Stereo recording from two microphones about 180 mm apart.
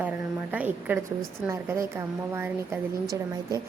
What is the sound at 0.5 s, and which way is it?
A woman's voice, 10° right (ahead or behind).